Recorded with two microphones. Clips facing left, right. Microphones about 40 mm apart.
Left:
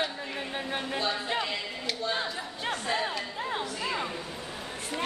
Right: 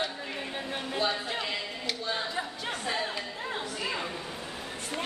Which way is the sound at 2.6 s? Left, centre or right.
Centre.